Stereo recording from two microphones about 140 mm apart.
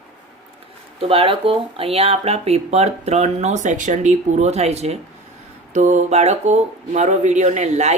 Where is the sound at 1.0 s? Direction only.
45° right (ahead or behind).